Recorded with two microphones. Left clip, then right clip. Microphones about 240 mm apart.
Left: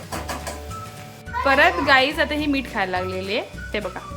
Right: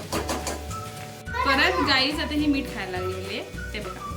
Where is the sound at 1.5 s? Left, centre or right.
Centre.